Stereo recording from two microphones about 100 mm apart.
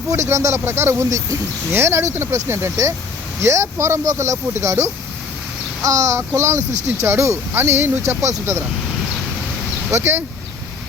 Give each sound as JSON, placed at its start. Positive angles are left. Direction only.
{"t": 0.1, "sound": "speech", "side_deg": -30}
{"t": 9.9, "sound": "speech", "side_deg": -25}